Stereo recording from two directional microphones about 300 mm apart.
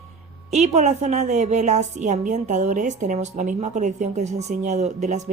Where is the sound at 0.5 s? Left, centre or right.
Right.